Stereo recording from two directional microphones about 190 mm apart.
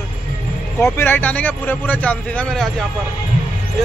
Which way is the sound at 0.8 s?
10° left (ahead or behind).